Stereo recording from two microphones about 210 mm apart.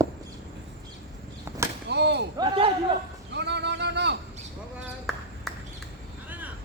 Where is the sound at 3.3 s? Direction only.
55° right (ahead or behind).